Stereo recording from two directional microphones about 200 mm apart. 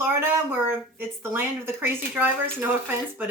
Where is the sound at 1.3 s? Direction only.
10° right (ahead or behind).